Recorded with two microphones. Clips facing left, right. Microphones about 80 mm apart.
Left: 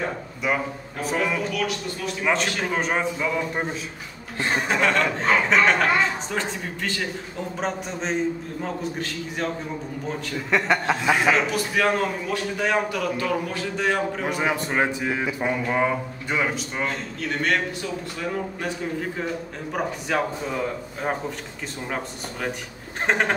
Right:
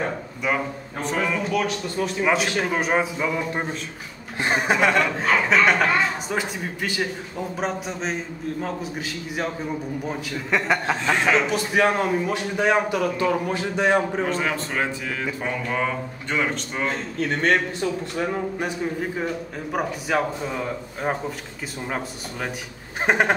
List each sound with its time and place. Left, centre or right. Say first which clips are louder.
0.4 s a man's voice: even; centre
4.4 s a man's voice: right 2 dB; centre
11.3 s a man's voice: right 2 dB; right
14.2 s a man's voice: even; centre
18.1 s a man's voice: right 3 dB; right
19.7 s a man's voice: right 2 dB; centre
23.0 s a man's voice: right 3 dB; centre